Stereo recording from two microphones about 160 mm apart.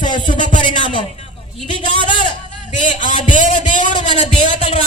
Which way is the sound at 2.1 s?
30° left (ahead or behind).